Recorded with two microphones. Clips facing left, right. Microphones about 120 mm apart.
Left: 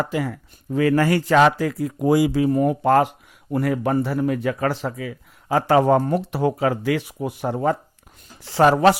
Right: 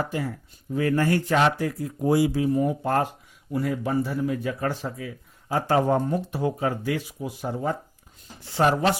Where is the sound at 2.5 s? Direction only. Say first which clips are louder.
Left 6 dB; 70° left (ahead or behind); by 3.1 s 85° left.